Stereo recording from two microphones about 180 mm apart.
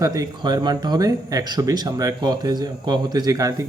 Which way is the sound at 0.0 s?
20° right (ahead or behind).